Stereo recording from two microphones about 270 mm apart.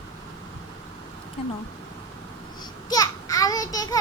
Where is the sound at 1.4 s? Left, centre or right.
Left.